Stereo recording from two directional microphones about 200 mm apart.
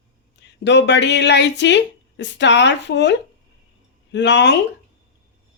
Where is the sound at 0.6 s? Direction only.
60° left (ahead or behind).